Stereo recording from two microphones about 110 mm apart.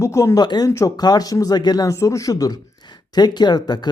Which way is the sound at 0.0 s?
25° left (ahead or behind).